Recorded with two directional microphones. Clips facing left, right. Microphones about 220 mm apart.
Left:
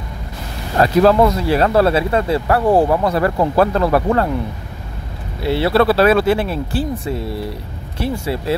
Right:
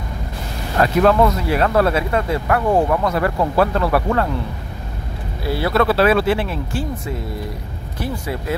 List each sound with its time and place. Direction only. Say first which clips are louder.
0.7 s speech: left 2 dB; 35° left (ahead or behind)
5.4 s speech: left 4 dB; 25° left (ahead or behind)
8.0 s speech: left 4 dB; 30° left (ahead or behind)